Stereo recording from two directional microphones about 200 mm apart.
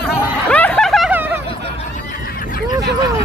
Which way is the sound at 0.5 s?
5° left (ahead or behind).